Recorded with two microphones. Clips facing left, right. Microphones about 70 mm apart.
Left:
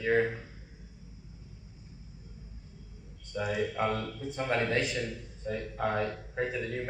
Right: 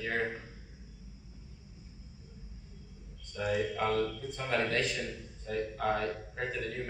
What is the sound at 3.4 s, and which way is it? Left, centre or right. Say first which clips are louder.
A man's voice: left 1 dB; left.